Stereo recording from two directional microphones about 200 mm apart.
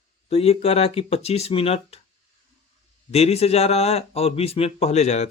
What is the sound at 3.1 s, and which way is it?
Speech, 30° left (ahead or behind).